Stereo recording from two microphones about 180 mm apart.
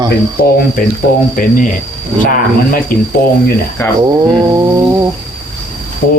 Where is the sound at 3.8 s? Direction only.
15° left (ahead or behind).